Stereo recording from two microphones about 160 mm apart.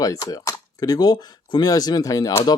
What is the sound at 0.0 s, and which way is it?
Speech, 20° left (ahead or behind).